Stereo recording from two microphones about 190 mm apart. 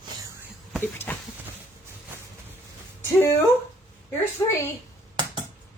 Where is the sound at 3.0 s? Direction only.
15° left (ahead or behind).